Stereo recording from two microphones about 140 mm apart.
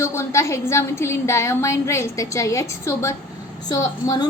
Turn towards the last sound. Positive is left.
turn(degrees=30)  # may be behind; listen again after turning